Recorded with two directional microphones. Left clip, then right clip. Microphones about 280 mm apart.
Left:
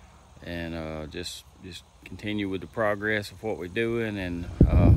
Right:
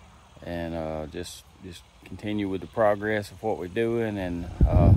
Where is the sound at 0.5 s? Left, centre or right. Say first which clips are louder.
Right 3 dB; centre.